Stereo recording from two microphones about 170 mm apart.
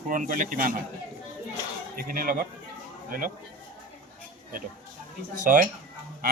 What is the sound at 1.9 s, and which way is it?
Speech, 60° right (ahead or behind).